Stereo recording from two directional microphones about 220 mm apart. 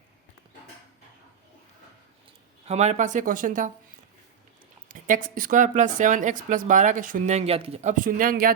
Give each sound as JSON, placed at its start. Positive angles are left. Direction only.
{"t": 2.6, "sound": "speech", "side_deg": -30}
{"t": 4.9, "sound": "speech", "side_deg": -35}